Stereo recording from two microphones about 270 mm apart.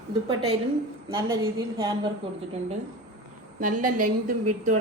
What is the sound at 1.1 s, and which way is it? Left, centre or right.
Speech, centre.